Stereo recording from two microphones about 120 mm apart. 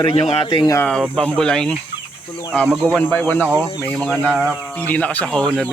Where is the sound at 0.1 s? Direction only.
45° left (ahead or behind).